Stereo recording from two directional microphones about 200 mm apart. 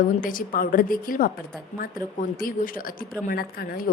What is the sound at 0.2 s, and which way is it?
A woman's voice, 45° left (ahead or behind).